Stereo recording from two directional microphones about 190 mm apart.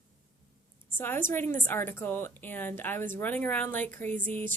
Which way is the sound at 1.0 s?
10° left (ahead or behind).